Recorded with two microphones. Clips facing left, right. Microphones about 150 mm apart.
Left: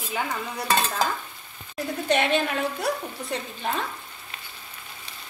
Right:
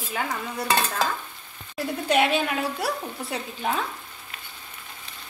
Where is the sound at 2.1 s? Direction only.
5° right (ahead or behind).